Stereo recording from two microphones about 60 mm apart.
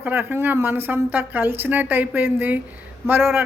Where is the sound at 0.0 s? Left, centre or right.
Right.